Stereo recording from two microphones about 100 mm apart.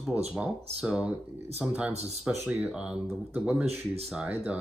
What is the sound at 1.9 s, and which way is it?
Speech, 90° right.